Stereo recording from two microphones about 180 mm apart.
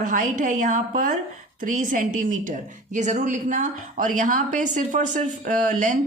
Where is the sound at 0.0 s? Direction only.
45° right (ahead or behind).